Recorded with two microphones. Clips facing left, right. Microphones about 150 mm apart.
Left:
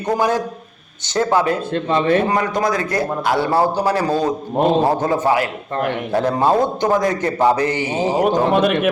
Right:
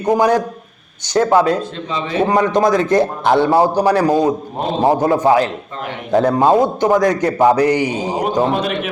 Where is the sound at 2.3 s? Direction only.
20° right (ahead or behind).